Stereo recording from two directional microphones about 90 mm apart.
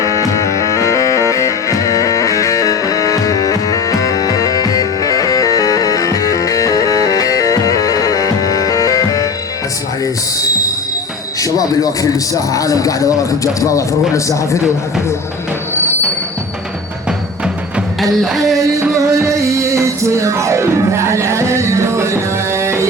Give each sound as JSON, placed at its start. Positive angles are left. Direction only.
{"t": 0.0, "sound": "music", "side_deg": 35}
{"t": 11.3, "sound": "a man's voice", "side_deg": 40}
{"t": 17.1, "sound": "music", "side_deg": -10}
{"t": 18.2, "sound": "a sound", "side_deg": 0}
{"t": 19.6, "sound": "music", "side_deg": -35}